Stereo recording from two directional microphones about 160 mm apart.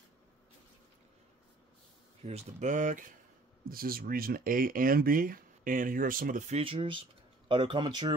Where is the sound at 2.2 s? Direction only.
45° right (ahead or behind).